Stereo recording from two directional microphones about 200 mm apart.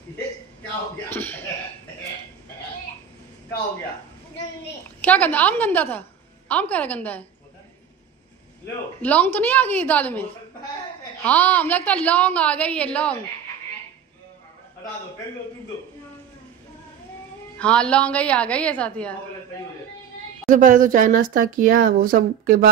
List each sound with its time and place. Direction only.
1.1 s a woman's voice: 10° left (ahead or behind)
5.0 s a woman's voice: 10° left (ahead or behind)
9.0 s a woman's voice: 5° left (ahead or behind)
11.2 s a woman's voice: 10° left (ahead or behind)
17.6 s a woman's voice: 5° left (ahead or behind)
20.4 s speech: 40° right (ahead or behind)